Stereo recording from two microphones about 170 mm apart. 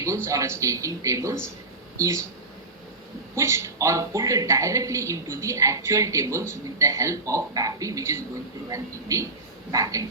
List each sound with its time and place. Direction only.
0.3 s a man's voice: 20° right (ahead or behind)
3.3 s a man's voice: 15° right (ahead or behind)